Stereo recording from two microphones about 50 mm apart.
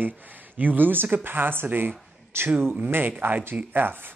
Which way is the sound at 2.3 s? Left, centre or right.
Right.